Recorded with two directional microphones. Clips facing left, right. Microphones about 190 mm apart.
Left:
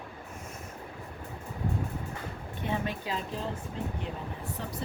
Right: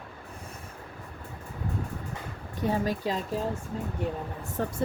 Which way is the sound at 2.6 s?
40° right (ahead or behind).